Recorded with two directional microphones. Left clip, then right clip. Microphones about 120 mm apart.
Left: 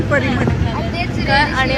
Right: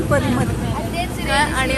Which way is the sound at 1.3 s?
30° right (ahead or behind).